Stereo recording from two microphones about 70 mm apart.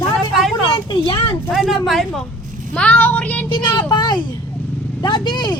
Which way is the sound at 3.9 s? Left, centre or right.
Left.